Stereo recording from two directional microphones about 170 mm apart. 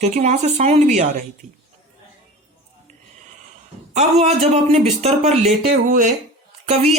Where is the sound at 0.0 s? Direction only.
45° right (ahead or behind).